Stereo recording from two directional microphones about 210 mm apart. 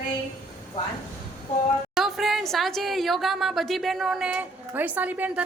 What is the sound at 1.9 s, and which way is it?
A woman's voice, centre (ahead or behind).